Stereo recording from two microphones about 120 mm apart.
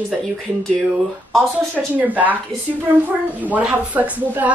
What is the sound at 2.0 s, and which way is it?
A woman's voice, 15° right (ahead or behind).